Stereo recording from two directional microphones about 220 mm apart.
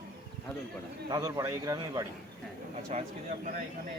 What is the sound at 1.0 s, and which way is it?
Speech, 15° right (ahead or behind).